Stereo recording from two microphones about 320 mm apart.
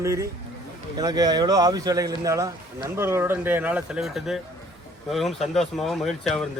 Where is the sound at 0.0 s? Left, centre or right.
Centre.